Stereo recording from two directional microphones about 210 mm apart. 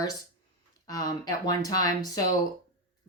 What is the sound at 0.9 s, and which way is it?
A woman's voice, 15° left (ahead or behind).